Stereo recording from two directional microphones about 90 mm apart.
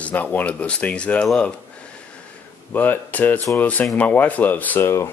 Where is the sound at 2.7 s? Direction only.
20° left (ahead or behind).